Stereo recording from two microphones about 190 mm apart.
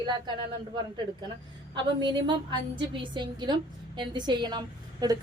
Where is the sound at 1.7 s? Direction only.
25° right (ahead or behind).